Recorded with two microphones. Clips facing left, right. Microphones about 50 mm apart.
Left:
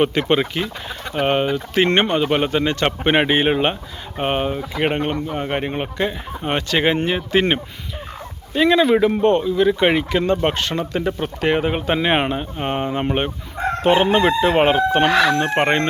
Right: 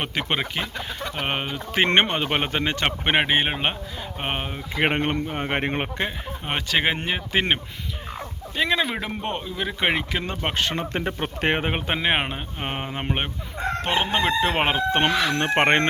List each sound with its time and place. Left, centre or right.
0.0 s speech: centre
1.7 s speech: right
3.0 s speech: centre
4.8 s speech: right
6.1 s speech: centre; by 11.8 s right
11.9 s speech: centre
13.8 s chicken: centre
14.4 s speech: centre
15.5 s speech: right